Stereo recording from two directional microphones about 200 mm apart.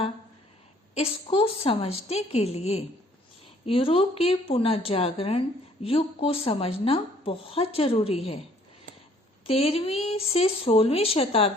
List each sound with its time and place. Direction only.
0.9 s a woman's voice: 30° left (ahead or behind)
9.5 s a woman's voice: 30° left (ahead or behind)